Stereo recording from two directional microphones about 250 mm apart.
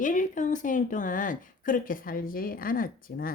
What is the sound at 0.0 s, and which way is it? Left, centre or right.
A woman's voice, left.